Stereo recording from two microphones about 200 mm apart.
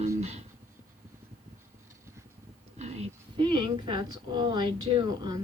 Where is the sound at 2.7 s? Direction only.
35° right (ahead or behind).